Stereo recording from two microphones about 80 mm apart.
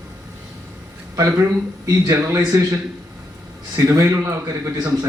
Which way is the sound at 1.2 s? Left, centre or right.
Right.